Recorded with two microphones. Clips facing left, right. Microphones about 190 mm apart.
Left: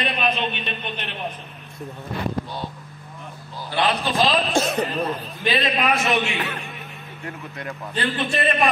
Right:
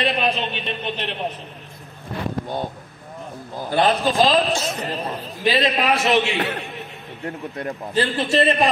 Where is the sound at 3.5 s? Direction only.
50° right (ahead or behind).